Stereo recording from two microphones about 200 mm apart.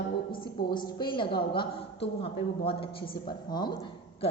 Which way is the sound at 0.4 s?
20° left (ahead or behind).